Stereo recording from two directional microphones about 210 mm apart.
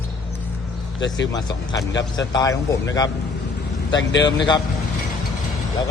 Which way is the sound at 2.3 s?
15° left (ahead or behind).